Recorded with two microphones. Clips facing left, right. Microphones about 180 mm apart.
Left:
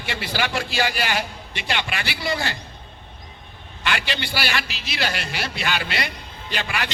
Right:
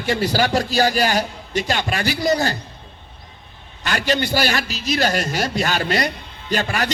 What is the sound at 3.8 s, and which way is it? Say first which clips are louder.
A man's voice: right 6 dB; 40° right (ahead or behind).